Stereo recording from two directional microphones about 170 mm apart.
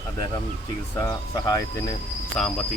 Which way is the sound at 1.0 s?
20° left (ahead or behind).